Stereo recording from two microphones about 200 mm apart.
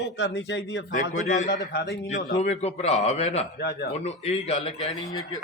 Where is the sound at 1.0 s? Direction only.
40° left (ahead or behind).